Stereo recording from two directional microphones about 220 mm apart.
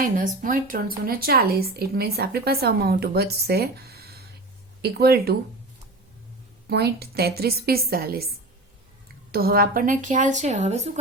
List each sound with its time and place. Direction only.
0.0 s a woman's voice: 35° right (ahead or behind)
6.7 s a woman's voice: 45° right (ahead or behind)
9.3 s speech: 45° right (ahead or behind)